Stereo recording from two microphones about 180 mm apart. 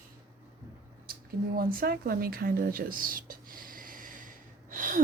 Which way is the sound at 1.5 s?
55° right (ahead or behind).